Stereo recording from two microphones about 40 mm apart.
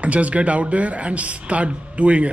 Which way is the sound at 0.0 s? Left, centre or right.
Right.